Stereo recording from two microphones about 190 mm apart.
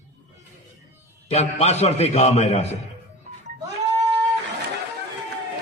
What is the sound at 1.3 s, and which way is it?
A man's voice, 35° left (ahead or behind).